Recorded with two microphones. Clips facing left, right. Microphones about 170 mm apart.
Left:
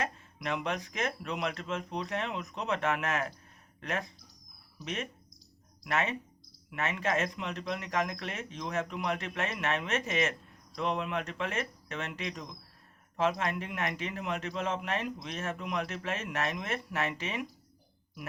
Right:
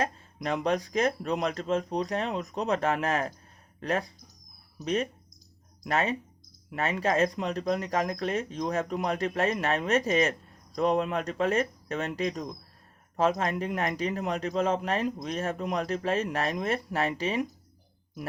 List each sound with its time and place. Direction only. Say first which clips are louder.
0.0 s speech: right 5 dB; 40° right (ahead or behind)